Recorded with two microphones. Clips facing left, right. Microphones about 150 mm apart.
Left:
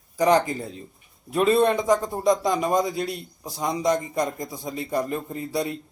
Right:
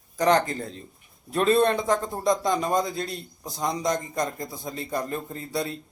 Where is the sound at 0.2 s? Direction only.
10° left (ahead or behind).